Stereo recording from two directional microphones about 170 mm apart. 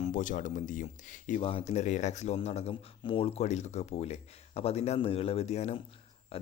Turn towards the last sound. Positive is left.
turn(degrees=35)  # may be behind; listen again after turning